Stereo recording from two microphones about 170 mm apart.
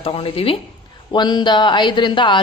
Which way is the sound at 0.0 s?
35° left (ahead or behind).